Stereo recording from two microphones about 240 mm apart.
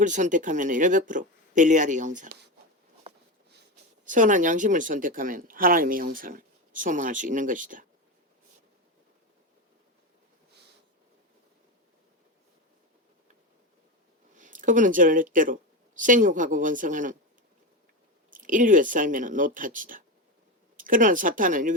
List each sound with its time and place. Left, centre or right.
0.0 s speech: right
4.0 s speech: right
14.3 s speech: right
18.3 s speech: right